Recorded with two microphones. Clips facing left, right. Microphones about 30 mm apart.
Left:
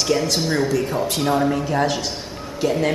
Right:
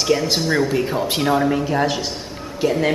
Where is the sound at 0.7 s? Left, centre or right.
Right.